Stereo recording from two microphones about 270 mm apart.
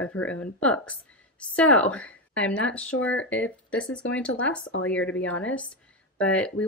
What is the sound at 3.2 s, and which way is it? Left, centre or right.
Speech, left.